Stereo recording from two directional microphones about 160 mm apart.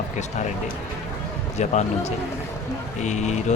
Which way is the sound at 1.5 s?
45° left (ahead or behind).